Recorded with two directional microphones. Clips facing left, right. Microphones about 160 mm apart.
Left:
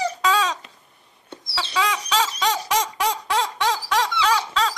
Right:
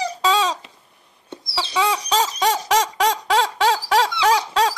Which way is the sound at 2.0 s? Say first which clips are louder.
Right 3 dB; 40° right (ahead or behind).